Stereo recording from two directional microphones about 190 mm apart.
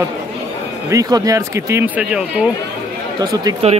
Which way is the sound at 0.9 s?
20° right (ahead or behind).